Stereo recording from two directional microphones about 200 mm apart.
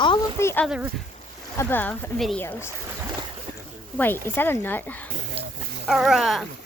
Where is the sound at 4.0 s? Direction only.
10° left (ahead or behind).